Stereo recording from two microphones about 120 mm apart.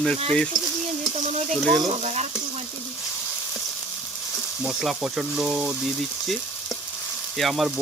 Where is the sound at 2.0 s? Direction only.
65° right (ahead or behind).